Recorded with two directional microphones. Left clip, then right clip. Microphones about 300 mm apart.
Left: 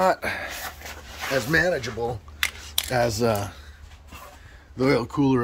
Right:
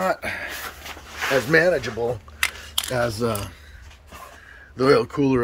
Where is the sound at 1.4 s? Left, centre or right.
Centre.